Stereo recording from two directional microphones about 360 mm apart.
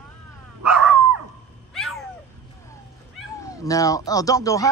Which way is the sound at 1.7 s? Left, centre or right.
Centre.